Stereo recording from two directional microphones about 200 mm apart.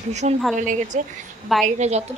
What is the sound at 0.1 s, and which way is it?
A woman's voice, 35° right (ahead or behind).